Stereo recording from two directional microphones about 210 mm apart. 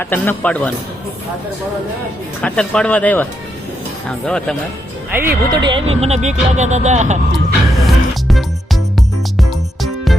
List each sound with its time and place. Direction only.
0.0 s a man's voice: 10° left (ahead or behind)
2.4 s speech: 5° left (ahead or behind)
4.3 s speech: 5° left (ahead or behind)
5.1 s speech: 10° right (ahead or behind); by 7.2 s 35° right (ahead or behind)
7.8 s music: centre (ahead or behind)